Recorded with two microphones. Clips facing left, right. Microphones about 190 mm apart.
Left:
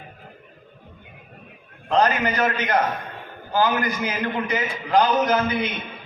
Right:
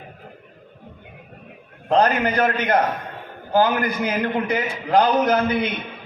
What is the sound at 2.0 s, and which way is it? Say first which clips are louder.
A man's voice: right 2 dB; 50° right (ahead or behind).